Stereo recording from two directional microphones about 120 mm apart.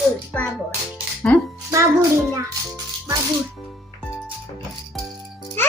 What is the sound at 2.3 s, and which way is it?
Speech, 25° right (ahead or behind).